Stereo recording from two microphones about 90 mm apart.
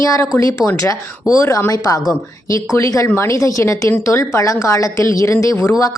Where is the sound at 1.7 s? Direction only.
45° left (ahead or behind).